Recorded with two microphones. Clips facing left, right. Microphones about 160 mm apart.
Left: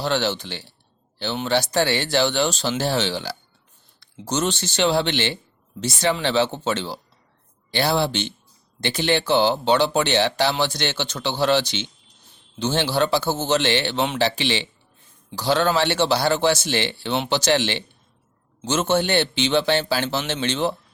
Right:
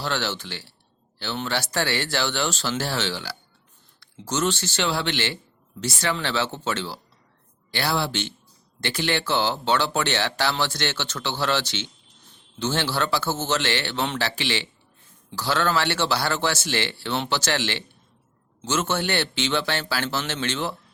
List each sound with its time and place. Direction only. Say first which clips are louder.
0.0 s a man's voice: left 5 dB; 20° left (ahead or behind)